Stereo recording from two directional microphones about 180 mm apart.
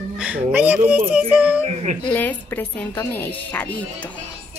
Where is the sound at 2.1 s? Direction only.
10° left (ahead or behind).